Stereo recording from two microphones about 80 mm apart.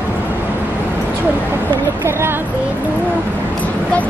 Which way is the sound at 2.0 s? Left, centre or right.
Right.